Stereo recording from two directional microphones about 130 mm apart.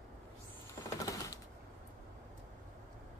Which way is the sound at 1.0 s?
25° left (ahead or behind).